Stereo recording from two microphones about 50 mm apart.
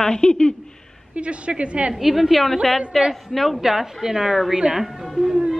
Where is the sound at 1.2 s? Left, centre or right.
Right.